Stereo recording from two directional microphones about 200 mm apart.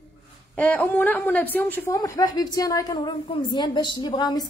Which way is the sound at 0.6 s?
10° left (ahead or behind).